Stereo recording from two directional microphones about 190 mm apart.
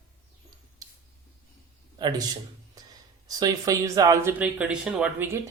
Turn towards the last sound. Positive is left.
turn(degrees=-10)  # may be behind; listen again after turning